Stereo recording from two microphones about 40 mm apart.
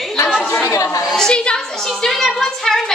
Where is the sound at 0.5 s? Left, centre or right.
Left.